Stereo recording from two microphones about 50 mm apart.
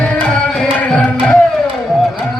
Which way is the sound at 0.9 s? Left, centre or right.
Centre.